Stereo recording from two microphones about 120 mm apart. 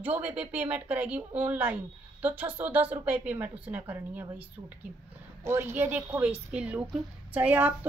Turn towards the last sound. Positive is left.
turn(degrees=-15)  # may be behind; listen again after turning